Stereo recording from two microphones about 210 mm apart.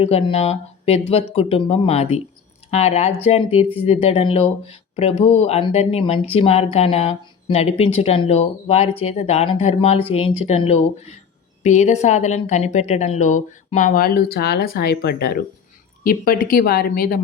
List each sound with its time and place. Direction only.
0.0 s a woman's voice: 25° left (ahead or behind); by 17.2 s 45° left (ahead or behind)